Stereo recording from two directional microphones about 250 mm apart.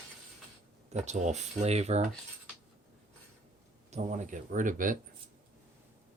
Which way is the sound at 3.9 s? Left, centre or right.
Right.